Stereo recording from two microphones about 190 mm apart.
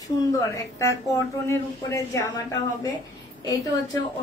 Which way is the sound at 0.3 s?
15° left (ahead or behind).